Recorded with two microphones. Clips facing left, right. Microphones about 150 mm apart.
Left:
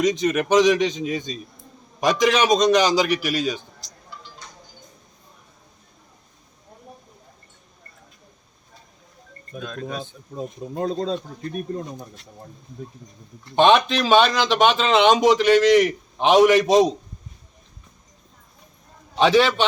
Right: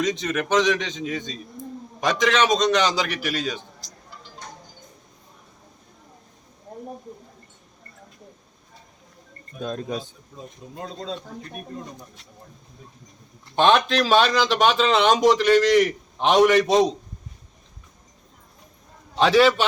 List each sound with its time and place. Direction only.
0.0 s a man's voice: 10° left (ahead or behind)
9.6 s speech: 35° right (ahead or behind)
9.9 s speech: 55° left (ahead or behind)
13.6 s speech: centre (ahead or behind)
19.1 s speech: centre (ahead or behind)